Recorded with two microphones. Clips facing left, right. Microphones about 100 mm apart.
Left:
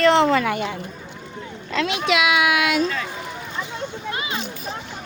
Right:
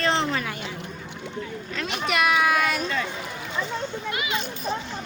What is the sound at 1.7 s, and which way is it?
Speech, 90° left.